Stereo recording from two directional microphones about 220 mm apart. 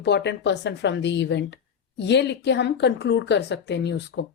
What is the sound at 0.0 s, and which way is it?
A woman's voice, 50° left (ahead or behind).